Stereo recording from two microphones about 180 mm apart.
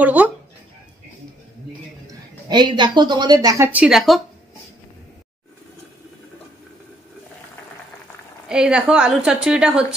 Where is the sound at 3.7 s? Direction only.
5° right (ahead or behind).